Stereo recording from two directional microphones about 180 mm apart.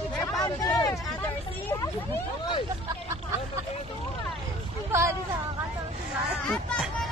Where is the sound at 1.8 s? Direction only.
25° left (ahead or behind).